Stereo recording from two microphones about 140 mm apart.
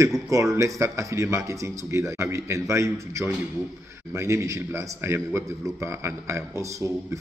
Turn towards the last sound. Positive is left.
turn(degrees=-20)  # may be behind; listen again after turning